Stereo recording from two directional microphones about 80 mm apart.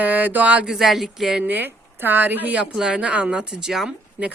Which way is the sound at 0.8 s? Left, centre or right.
Centre.